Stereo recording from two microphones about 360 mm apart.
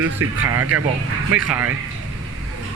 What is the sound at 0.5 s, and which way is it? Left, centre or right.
Speech, right.